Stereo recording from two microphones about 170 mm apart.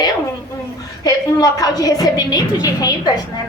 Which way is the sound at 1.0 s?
20° left (ahead or behind).